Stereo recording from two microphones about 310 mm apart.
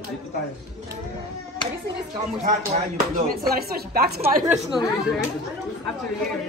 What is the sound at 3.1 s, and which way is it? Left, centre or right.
Speech, right.